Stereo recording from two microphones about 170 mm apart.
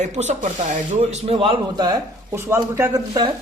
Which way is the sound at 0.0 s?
45° right (ahead or behind).